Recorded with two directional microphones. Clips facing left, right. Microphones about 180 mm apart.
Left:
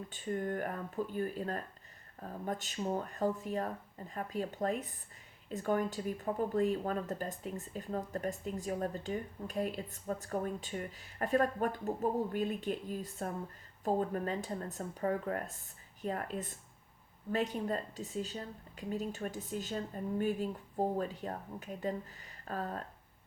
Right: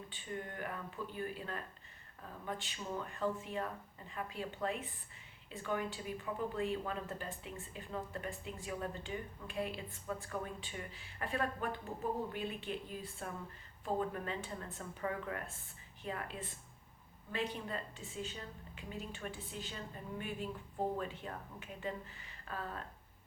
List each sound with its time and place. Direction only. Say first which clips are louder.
0.1 s a woman's voice: left 10 dB; 45° left (ahead or behind)